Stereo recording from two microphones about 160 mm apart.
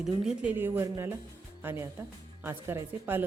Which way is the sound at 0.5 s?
15° right (ahead or behind).